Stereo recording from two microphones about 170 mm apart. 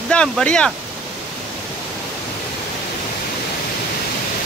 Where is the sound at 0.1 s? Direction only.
5° left (ahead or behind).